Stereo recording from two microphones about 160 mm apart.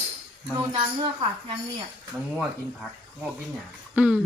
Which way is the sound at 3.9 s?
10° right (ahead or behind).